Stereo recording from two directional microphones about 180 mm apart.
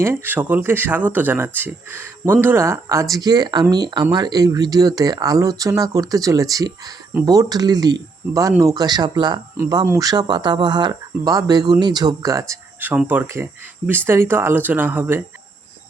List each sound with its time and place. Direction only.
0.0 s speech: 10° right (ahead or behind)